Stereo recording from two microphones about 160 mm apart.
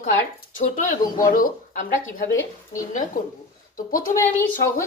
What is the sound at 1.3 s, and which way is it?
Speech, 60° left (ahead or behind).